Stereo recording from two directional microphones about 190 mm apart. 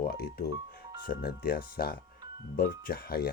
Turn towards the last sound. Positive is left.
turn(degrees=55)  # may be behind; listen again after turning